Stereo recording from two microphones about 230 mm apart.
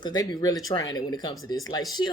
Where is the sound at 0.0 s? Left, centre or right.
Centre.